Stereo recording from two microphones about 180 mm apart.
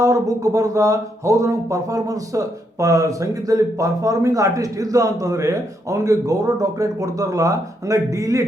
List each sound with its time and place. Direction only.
0.0 s speech: 20° right (ahead or behind)